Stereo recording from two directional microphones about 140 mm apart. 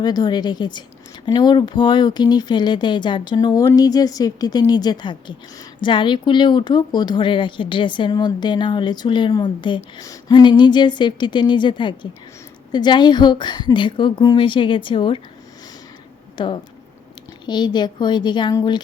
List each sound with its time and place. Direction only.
0.0 s speech: 30° left (ahead or behind)
16.4 s speech: 35° left (ahead or behind)